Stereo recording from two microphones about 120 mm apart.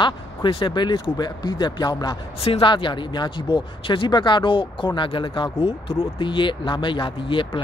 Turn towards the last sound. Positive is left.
turn(degrees=45)  # may be behind; listen again after turning